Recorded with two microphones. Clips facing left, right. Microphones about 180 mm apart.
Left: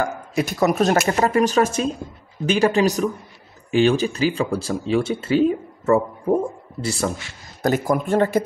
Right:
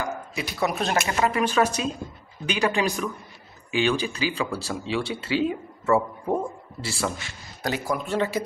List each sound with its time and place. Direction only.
0.0 s speech: 45° left (ahead or behind)